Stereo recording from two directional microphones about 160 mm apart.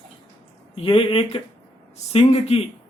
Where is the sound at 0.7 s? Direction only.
35° left (ahead or behind).